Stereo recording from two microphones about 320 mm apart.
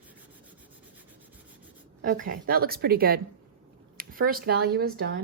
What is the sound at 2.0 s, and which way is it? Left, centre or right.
Speech, right.